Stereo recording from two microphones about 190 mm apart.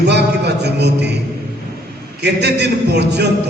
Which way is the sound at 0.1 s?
60° right (ahead or behind).